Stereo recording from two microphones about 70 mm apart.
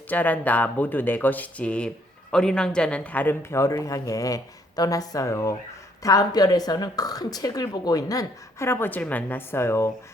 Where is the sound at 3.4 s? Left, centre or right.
Left.